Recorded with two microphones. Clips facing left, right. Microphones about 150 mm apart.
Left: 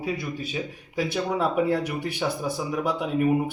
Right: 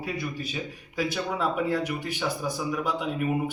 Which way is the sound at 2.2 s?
30° left (ahead or behind).